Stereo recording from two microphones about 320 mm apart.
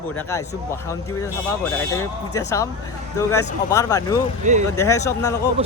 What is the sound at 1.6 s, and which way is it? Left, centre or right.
Speech, centre.